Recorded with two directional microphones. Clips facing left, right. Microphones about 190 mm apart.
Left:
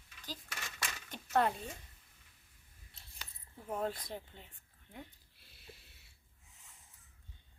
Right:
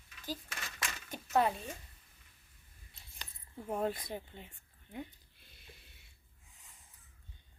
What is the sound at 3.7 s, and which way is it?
Speech, 20° right (ahead or behind).